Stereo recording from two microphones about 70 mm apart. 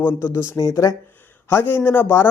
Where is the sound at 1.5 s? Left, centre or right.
Left.